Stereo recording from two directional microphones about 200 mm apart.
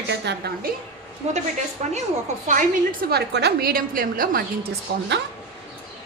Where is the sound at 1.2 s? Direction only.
35° right (ahead or behind).